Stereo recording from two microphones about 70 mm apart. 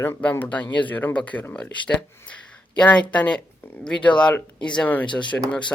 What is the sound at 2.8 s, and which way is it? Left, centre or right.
Speech, centre.